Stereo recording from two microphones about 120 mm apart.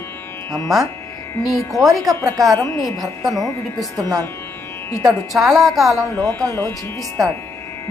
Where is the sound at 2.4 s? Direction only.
Centre (ahead or behind).